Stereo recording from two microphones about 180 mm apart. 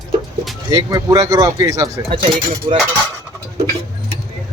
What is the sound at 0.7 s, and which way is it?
Speech, 20° right (ahead or behind).